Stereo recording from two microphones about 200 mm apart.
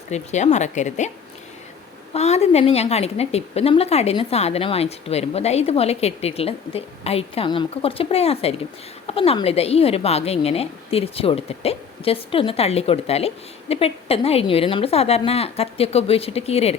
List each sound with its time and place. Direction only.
0.1 s a woman's voice: 35° left (ahead or behind)
2.1 s a woman's voice: 30° left (ahead or behind)